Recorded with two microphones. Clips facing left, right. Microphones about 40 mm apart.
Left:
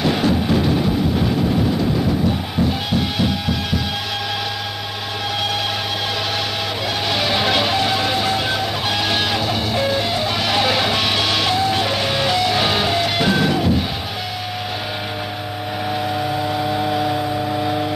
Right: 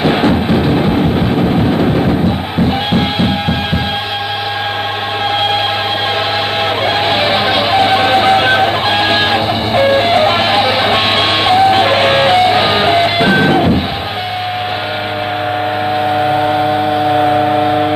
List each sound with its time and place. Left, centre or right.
0.0 s music: right
1.7 s a sound: right
2.9 s music: right
7.1 s music: right
10.6 s music: right
16.1 s civil defense siren: right
17.2 s siren: right